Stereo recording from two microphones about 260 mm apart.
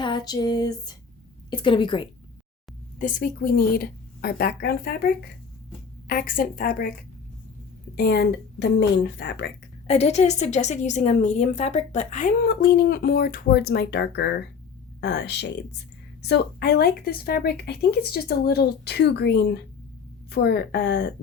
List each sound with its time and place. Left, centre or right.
0.0 s a sound: centre
1.5 s a woman's voice: centre
3.0 s speech: left
7.9 s speech: left
9.8 s a woman's voice: left